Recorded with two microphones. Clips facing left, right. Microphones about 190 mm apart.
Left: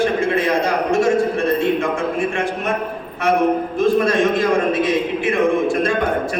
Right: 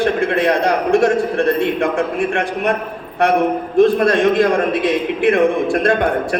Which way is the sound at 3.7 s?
60° right (ahead or behind).